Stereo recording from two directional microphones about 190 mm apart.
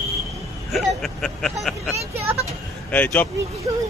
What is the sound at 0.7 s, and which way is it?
Speech, centre (ahead or behind).